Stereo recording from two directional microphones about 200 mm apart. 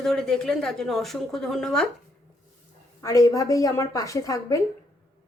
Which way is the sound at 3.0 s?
15° left (ahead or behind).